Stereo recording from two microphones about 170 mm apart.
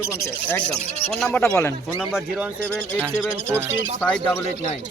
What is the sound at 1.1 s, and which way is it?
A man's voice, centre (ahead or behind).